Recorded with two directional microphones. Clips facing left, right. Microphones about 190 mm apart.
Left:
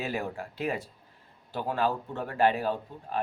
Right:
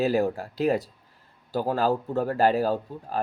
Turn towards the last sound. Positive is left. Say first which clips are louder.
# right 4 dB
turn(degrees=-40)  # may be behind; listen again after turning